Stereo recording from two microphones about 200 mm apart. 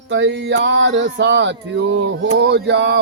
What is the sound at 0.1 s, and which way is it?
Mantra, 65° right (ahead or behind).